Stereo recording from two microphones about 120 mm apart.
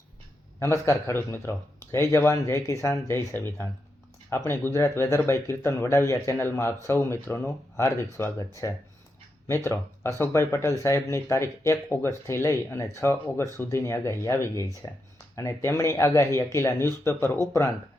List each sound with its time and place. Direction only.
0.6 s speech: 25° left (ahead or behind)